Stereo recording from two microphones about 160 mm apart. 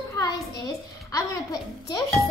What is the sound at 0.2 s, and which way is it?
A child's voice, 20° left (ahead or behind).